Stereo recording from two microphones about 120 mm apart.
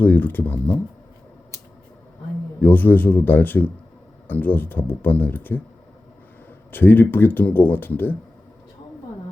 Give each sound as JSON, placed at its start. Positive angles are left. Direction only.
{"t": 0.0, "sound": "speech", "side_deg": 15}
{"t": 2.6, "sound": "speech", "side_deg": 15}
{"t": 6.7, "sound": "speech", "side_deg": 15}